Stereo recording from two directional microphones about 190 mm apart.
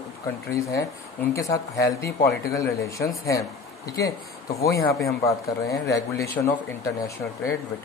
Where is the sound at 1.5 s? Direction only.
15° left (ahead or behind).